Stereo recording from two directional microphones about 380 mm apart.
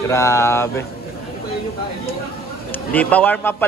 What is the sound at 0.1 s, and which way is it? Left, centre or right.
Speech, centre.